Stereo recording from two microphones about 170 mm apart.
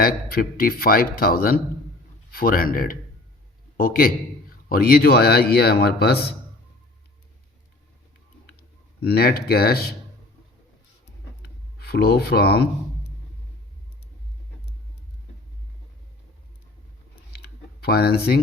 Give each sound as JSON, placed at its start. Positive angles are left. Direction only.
{"t": 0.0, "sound": "speech", "side_deg": 60}
{"t": 9.0, "sound": "speech", "side_deg": 70}
{"t": 11.8, "sound": "speech", "side_deg": 70}
{"t": 17.3, "sound": "a sound", "side_deg": 65}